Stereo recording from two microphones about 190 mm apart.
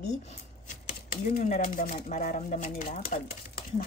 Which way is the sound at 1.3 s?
45° left (ahead or behind).